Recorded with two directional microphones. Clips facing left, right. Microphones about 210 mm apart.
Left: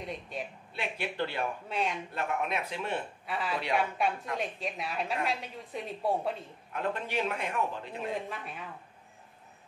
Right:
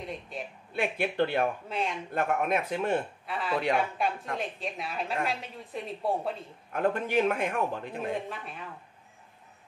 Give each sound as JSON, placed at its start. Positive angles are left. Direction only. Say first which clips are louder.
{"t": 0.7, "sound": "a man's voice", "louder": "right 7 dB", "side_deg": -55}
{"t": 1.7, "sound": "a woman's voice", "louder": "even", "side_deg": 0}
{"t": 2.1, "sound": "a man's voice", "louder": "right 7 dB", "side_deg": -50}
{"t": 3.3, "sound": "a woman's voice", "louder": "right 3 dB", "side_deg": 0}
{"t": 6.7, "sound": "a man's voice", "louder": "right 6 dB", "side_deg": -50}
{"t": 8.3, "sound": "a woman's voice", "louder": "right 1 dB", "side_deg": 0}